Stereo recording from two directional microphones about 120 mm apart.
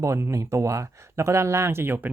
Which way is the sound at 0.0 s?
25° right (ahead or behind).